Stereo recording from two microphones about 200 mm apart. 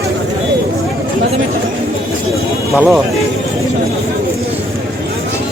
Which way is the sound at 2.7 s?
5° right (ahead or behind).